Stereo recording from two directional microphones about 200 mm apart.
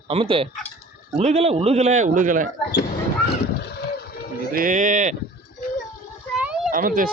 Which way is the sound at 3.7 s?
50° left (ahead or behind).